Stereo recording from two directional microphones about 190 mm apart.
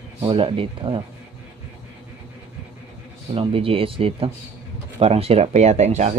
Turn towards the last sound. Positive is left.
turn(degrees=-35)  # may be behind; listen again after turning